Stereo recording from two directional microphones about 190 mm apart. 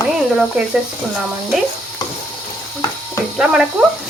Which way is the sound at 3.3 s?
5° right (ahead or behind).